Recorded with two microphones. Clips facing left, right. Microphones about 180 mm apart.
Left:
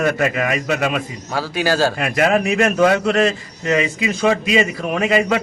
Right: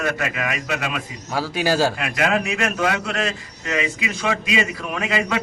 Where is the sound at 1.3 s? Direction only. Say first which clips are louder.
Left 1 dB; 10° right (ahead or behind).